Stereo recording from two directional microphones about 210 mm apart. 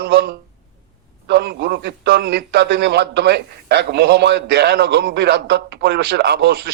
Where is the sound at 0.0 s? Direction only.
50° right (ahead or behind).